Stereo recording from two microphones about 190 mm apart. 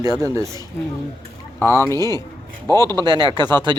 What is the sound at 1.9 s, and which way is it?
A man's voice, 20° right (ahead or behind).